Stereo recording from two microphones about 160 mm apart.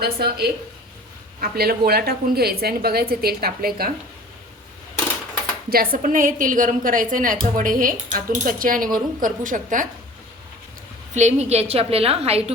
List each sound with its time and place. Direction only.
0.0 s a woman's voice: 80° right
5.7 s speech: 65° right (ahead or behind)
11.1 s a woman's voice: 45° right (ahead or behind)